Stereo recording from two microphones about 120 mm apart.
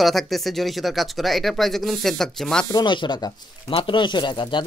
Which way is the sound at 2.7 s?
40° left (ahead or behind).